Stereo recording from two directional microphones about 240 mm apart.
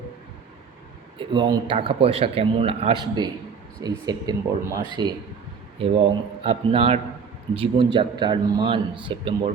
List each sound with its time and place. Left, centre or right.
1.2 s a man's voice: centre
6.4 s a man's voice: right